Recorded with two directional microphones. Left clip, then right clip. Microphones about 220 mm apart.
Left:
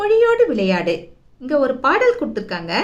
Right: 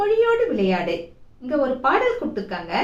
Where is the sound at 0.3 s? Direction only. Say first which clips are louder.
Left 4 dB; 50° left (ahead or behind).